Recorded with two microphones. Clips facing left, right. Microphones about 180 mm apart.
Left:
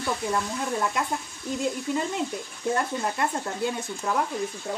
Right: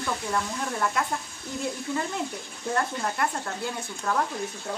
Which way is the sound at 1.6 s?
20° left (ahead or behind).